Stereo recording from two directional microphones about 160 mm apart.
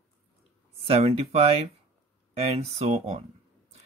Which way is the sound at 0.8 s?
40° right (ahead or behind).